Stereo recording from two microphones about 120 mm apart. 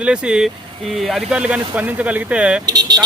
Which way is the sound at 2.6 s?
35° right (ahead or behind).